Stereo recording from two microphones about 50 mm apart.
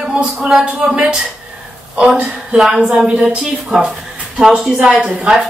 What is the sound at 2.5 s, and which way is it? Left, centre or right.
Speech, centre.